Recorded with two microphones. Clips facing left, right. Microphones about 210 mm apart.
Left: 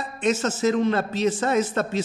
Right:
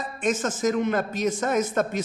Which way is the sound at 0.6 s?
30° left (ahead or behind).